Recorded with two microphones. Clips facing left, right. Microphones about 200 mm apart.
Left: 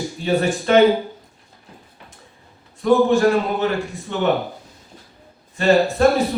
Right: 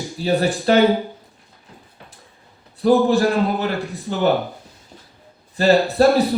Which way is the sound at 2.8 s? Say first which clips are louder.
Even; 35° right (ahead or behind).